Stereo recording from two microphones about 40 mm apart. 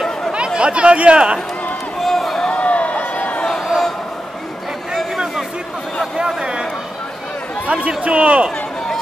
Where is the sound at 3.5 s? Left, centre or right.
Centre.